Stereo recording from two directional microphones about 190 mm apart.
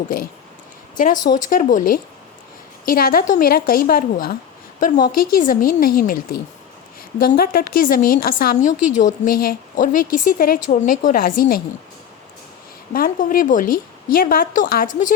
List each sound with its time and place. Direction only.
0.9 s a woman's voice: 45° left (ahead or behind)
12.9 s a woman's voice: 50° left (ahead or behind)